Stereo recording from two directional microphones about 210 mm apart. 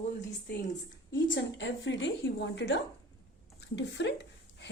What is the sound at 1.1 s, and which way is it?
A woman's voice, 60° left (ahead or behind).